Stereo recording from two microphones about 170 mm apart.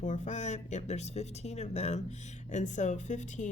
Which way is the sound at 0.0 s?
45° left (ahead or behind).